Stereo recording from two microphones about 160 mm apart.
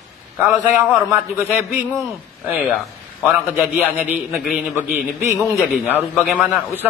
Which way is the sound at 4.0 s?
5° right (ahead or behind).